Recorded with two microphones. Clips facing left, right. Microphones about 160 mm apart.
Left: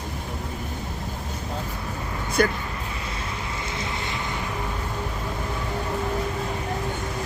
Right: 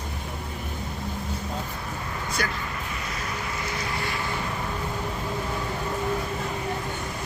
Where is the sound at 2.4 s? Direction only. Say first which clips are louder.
Left 10 dB; 50° left (ahead or behind).